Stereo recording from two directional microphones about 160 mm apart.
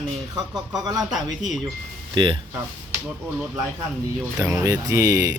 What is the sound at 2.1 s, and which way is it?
Speech, 30° right (ahead or behind).